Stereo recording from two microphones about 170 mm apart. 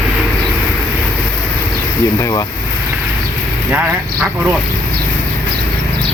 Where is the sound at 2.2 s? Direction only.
20° left (ahead or behind).